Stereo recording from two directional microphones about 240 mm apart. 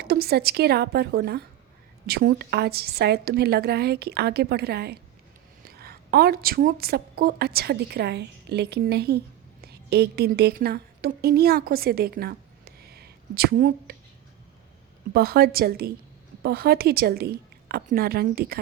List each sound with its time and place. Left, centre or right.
0.0 s a woman's voice: right
15.1 s a woman's voice: right